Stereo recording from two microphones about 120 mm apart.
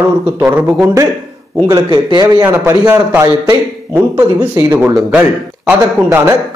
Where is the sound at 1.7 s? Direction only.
35° right (ahead or behind).